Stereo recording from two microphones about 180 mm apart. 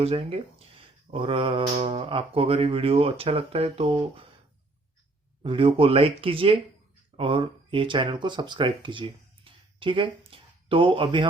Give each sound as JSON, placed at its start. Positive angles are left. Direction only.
{"t": 0.0, "sound": "mantra", "side_deg": -30}
{"t": 5.4, "sound": "speech", "side_deg": -30}